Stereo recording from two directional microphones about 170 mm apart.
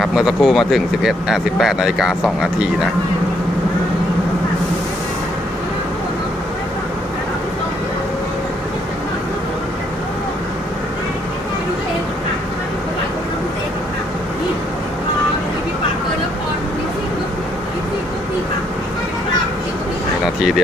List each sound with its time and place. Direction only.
0.0 s speech: centre (ahead or behind)